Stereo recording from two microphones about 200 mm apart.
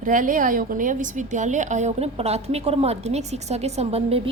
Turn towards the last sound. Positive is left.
turn(degrees=-30)  # may be behind; listen again after turning